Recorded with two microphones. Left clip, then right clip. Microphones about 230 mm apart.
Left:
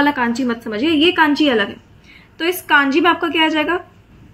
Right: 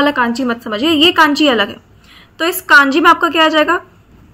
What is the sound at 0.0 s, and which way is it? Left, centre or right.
A woman's voice, centre.